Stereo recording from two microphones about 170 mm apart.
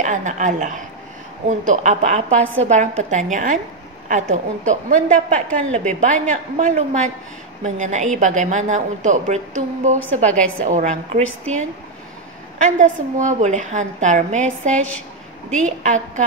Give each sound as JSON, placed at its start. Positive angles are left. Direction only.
{"t": 0.0, "sound": "a woman's voice", "side_deg": -45}
{"t": 12.5, "sound": "a woman's voice", "side_deg": -45}
{"t": 15.8, "sound": "a woman's voice", "side_deg": -45}